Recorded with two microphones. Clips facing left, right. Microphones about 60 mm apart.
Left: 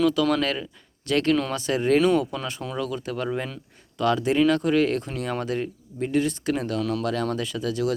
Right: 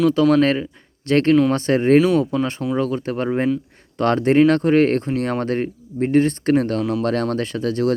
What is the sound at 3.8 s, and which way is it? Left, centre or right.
Speech, right.